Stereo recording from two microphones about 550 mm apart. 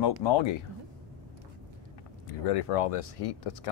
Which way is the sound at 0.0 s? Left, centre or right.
Left.